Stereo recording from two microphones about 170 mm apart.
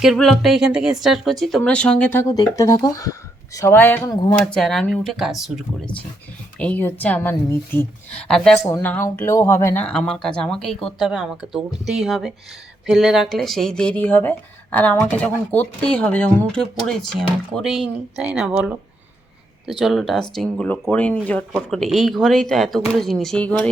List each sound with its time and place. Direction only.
0.0 s speech: centre (ahead or behind)
2.2 s speech: 20° left (ahead or behind)
4.1 s speech: 25° left (ahead or behind)
4.5 s speech: 5° left (ahead or behind)
6.6 s speech: 10° left (ahead or behind); by 18.8 s 5° right (ahead or behind)
19.8 s speech: centre (ahead or behind)